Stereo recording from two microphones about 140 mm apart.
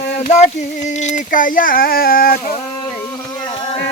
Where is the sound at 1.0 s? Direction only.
65° left (ahead or behind); by 2.4 s 90° left.